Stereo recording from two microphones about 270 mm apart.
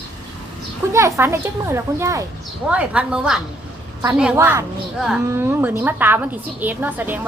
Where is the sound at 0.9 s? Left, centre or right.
Centre.